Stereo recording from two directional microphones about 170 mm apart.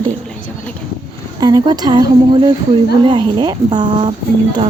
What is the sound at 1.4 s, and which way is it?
Speech, 25° right (ahead or behind).